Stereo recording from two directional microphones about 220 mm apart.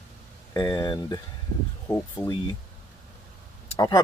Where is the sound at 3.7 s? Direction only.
15° left (ahead or behind).